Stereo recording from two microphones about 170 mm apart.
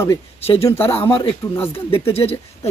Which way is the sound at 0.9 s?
30° left (ahead or behind).